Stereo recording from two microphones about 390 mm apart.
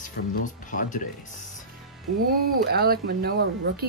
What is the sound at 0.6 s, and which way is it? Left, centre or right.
Speech, centre.